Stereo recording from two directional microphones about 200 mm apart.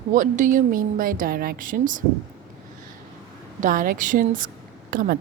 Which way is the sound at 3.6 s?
45° right (ahead or behind).